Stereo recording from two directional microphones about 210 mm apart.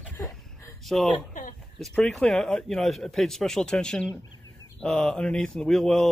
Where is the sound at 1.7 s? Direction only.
Centre (ahead or behind).